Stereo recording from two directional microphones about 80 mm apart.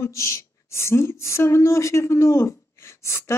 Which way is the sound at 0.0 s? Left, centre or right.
Left.